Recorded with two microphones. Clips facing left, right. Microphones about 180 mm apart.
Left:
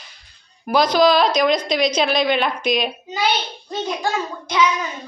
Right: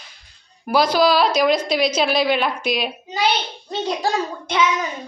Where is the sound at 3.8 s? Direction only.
35° right (ahead or behind).